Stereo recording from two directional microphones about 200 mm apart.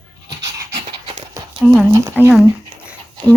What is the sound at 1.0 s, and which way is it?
Dog, 20° right (ahead or behind).